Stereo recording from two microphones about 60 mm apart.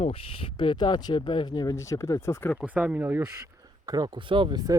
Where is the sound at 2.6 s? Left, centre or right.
Right.